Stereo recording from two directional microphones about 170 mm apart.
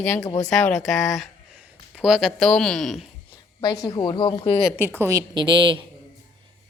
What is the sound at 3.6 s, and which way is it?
A woman's voice, 20° left (ahead or behind).